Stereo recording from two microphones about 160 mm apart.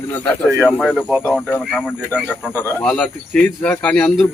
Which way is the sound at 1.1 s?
5° right (ahead or behind).